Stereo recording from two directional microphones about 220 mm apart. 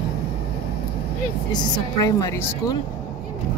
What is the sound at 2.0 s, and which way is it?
Speech, 15° left (ahead or behind).